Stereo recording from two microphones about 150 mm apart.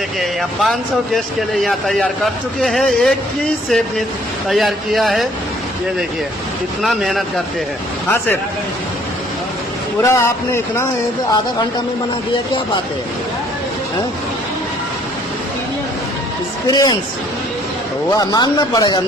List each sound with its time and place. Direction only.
0.2 s speech: centre (ahead or behind)
6.8 s speech: centre (ahead or behind)
10.0 s speech: 20° left (ahead or behind)
16.6 s speech: 25° left (ahead or behind)
18.1 s speech: 25° left (ahead or behind)